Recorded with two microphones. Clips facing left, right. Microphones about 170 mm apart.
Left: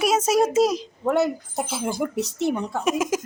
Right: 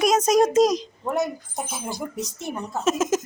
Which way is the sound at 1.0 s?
75° left (ahead or behind).